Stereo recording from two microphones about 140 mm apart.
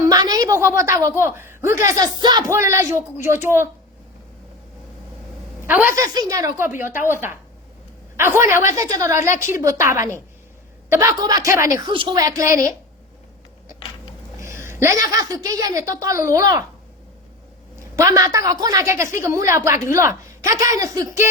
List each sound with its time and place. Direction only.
0.1 s a woman's voice: 25° right (ahead or behind)
2.5 s a woman's voice: 20° right (ahead or behind)
5.6 s a woman's voice: 15° right (ahead or behind)
11.9 s a woman's voice: 35° right (ahead or behind)
14.4 s a woman's voice: 20° right (ahead or behind)
17.9 s a woman's voice: 25° right (ahead or behind)